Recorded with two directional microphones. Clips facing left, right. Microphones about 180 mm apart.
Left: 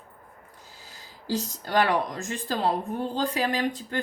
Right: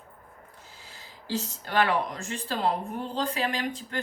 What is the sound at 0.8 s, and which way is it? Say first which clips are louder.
Speech: left 5 dB; 40° left (ahead or behind).